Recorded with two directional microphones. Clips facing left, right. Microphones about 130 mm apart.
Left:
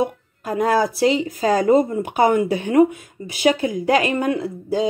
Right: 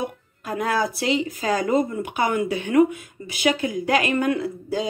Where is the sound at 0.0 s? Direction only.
35° left (ahead or behind).